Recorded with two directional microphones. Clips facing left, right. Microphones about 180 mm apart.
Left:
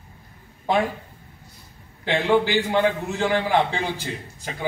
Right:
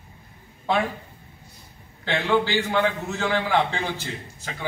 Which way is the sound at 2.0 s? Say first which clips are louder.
Left 3 dB; 15° left (ahead or behind).